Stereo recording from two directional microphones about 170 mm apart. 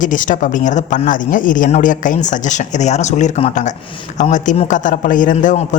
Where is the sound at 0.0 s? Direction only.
50° left (ahead or behind).